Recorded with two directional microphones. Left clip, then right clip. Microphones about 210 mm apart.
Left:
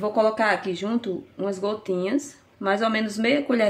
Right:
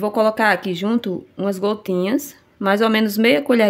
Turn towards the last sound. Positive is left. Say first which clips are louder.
# right 6 dB
turn(degrees=-60)  # may be behind; listen again after turning